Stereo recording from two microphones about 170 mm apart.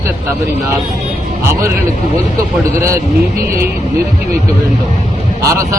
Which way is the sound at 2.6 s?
15° right (ahead or behind).